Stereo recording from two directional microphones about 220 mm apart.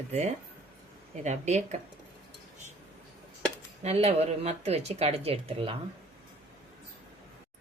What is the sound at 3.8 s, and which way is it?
Speech, 30° right (ahead or behind).